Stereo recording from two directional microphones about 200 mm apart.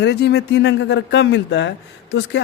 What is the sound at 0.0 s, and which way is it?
A man's voice, 60° left (ahead or behind).